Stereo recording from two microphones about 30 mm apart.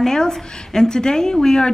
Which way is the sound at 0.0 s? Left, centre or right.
Centre.